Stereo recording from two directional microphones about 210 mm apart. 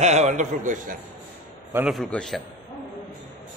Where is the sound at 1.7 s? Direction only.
Centre (ahead or behind).